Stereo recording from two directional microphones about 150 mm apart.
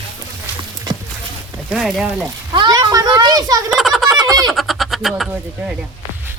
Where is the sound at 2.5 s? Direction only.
30° right (ahead or behind).